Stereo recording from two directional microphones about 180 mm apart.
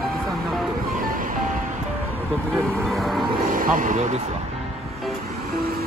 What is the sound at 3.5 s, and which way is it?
Speech, 50° right (ahead or behind).